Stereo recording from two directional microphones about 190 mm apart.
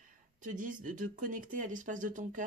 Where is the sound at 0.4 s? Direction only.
45° right (ahead or behind).